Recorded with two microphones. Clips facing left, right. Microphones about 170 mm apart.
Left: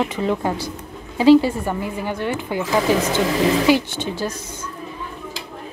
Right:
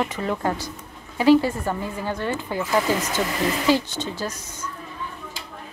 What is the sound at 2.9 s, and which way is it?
Speech, 30° left (ahead or behind).